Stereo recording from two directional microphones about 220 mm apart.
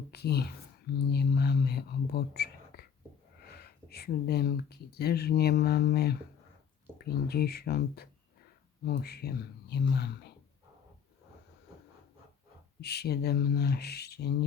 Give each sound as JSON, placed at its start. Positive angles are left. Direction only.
{"t": 0.1, "sound": "speech", "side_deg": 45}
{"t": 12.8, "sound": "speech", "side_deg": 45}